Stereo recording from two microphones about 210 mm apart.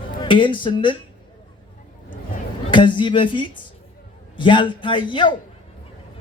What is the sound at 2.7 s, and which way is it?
A man's voice, 20° left (ahead or behind).